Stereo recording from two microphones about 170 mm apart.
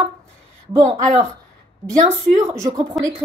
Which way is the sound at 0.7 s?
20° right (ahead or behind).